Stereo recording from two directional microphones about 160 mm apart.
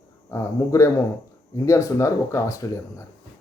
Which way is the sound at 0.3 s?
20° left (ahead or behind).